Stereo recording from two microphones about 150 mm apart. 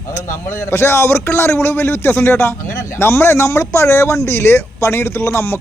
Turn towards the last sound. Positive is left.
turn(degrees=15)  # may be behind; listen again after turning